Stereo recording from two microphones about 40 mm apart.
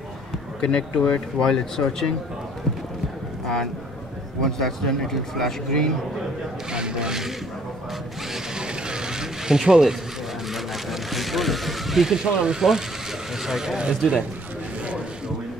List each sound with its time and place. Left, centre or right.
0.6 s speech: left
1.5 s speech: centre
4.4 s speech: centre
6.7 s speech: right
8.3 s speech: right
10.5 s vehicle: centre
12.1 s speech: centre
13.7 s speech: right